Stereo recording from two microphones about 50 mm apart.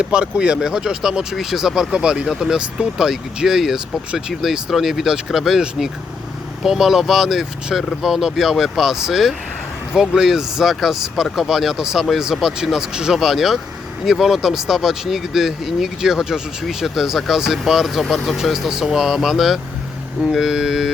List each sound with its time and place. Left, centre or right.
0.0 s speech: centre